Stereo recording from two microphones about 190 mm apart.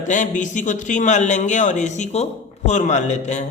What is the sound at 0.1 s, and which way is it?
Speech, 40° left (ahead or behind).